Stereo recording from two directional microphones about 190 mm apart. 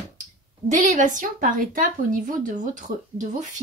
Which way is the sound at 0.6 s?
40° right (ahead or behind).